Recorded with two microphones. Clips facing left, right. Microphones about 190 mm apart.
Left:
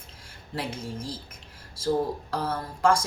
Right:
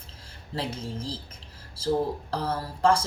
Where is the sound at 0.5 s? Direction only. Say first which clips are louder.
Right 1 dB; 30° right (ahead or behind).